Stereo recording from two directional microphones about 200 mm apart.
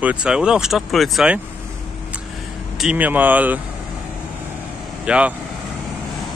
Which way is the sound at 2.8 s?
5° right (ahead or behind).